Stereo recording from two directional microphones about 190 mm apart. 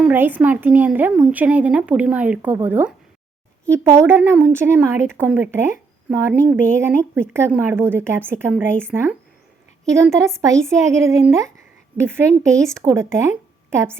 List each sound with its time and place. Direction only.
0.0 s speech: 10° right (ahead or behind)